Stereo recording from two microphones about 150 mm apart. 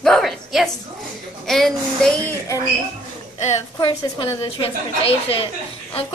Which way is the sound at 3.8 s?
30° left (ahead or behind).